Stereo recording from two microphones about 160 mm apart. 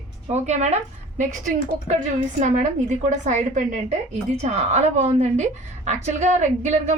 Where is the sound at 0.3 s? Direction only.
45° right (ahead or behind).